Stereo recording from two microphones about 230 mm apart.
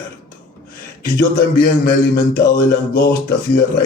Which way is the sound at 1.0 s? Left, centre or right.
Left.